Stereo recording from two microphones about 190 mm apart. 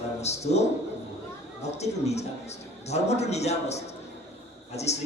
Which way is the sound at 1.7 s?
35° left (ahead or behind).